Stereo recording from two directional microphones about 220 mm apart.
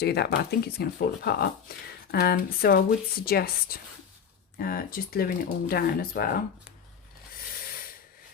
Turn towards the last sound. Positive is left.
turn(degrees=40)  # may be behind; listen again after turning